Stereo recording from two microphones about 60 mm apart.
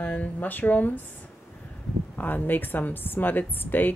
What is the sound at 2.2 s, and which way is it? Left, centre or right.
A woman's voice, left.